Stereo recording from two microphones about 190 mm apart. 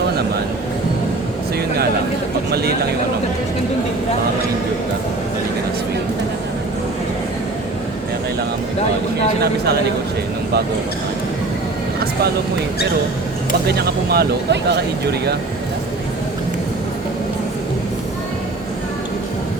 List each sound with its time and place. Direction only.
2.5 s a man's voice: 55° right (ahead or behind)
13.7 s speech: 55° right (ahead or behind)